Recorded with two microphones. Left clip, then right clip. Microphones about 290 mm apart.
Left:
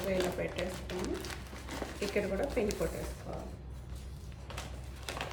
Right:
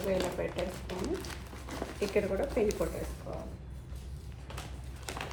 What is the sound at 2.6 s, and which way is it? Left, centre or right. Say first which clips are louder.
Speech: right 4 dB; centre.